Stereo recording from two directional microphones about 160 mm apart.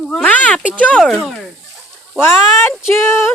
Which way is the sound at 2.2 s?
15° left (ahead or behind).